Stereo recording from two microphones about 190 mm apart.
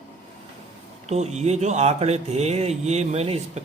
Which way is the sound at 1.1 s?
35° right (ahead or behind).